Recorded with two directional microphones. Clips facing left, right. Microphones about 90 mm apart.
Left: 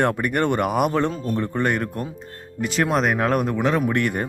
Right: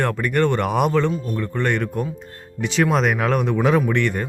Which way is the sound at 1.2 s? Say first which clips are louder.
Left 2 dB; 35° left (ahead or behind).